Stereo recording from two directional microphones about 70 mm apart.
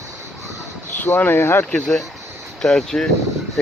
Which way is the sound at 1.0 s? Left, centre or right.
Left.